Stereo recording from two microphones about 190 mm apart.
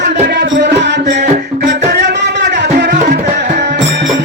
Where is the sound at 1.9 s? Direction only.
65° right (ahead or behind).